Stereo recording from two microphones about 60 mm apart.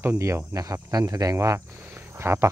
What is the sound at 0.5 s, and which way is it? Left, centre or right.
Speech, right.